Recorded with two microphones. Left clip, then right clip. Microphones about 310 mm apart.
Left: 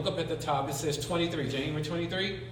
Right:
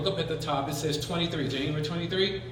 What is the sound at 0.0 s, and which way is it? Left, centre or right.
A man's voice, left.